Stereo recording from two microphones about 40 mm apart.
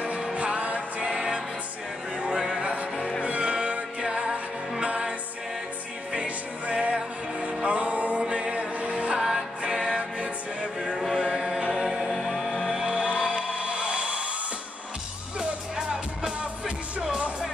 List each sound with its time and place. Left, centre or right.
0.0 s music: right
2.1 s a sound: centre
2.6 s music: right
4.1 s music: centre
6.1 s music: right
11.1 s chant: centre
11.7 s music: centre
12.9 s music: right
15.9 s music: centre